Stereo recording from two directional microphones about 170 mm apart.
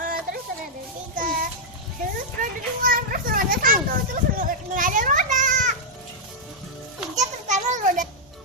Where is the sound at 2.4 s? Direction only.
55° right (ahead or behind).